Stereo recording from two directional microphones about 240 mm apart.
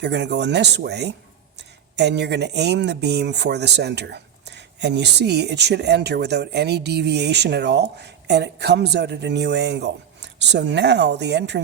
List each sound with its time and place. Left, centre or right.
0.0 s speech: right